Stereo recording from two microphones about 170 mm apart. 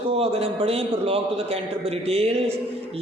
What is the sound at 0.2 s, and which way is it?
A man's voice, 35° right (ahead or behind).